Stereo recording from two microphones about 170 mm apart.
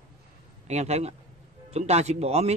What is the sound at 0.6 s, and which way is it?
Speech, 40° right (ahead or behind).